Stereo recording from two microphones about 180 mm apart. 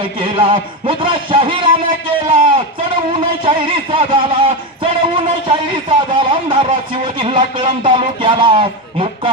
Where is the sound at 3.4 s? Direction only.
25° right (ahead or behind).